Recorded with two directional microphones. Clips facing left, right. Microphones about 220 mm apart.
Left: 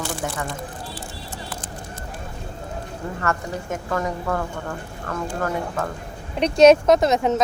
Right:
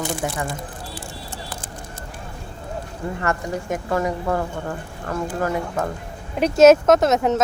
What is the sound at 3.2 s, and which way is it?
A woman's voice, 15° right (ahead or behind).